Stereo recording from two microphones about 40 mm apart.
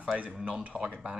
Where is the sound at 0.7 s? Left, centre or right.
Right.